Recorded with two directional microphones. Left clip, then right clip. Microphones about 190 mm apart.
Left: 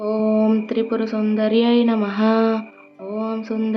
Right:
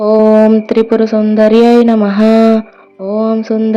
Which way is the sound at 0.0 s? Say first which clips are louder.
Right 13 dB; 40° right (ahead or behind).